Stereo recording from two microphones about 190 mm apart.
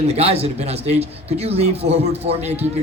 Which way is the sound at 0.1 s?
30° right (ahead or behind).